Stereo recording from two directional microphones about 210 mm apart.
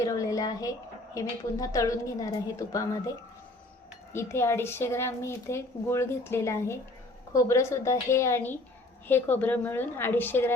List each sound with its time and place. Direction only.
0.0 s a woman's voice: 15° left (ahead or behind)
4.1 s a woman's voice: 10° left (ahead or behind)